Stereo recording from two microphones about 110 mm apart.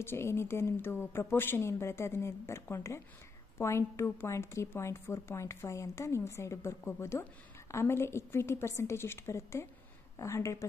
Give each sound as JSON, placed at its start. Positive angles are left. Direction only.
{"t": 0.0, "sound": "a woman's voice", "side_deg": 20}